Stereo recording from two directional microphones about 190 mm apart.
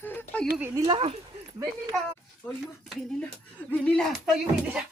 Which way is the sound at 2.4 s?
10° left (ahead or behind).